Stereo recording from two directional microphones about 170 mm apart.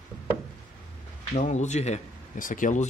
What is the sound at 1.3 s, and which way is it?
Speech, 45° left (ahead or behind).